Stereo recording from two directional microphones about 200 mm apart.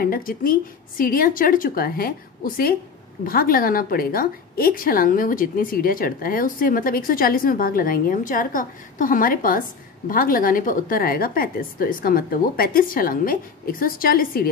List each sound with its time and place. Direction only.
0.0 s a woman's voice: 45° left (ahead or behind)